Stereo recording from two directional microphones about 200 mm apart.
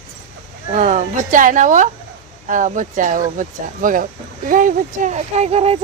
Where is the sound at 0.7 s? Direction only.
40° right (ahead or behind).